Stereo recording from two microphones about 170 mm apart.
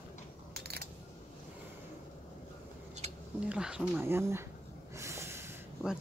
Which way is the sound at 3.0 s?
40° right (ahead or behind).